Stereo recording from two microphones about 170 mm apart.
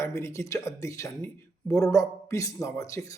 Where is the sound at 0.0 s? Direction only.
15° left (ahead or behind).